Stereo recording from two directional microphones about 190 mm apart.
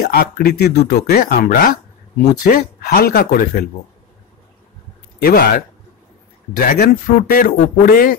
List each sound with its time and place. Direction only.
0.0 s speech: 55° left (ahead or behind)
6.5 s speech: 45° left (ahead or behind)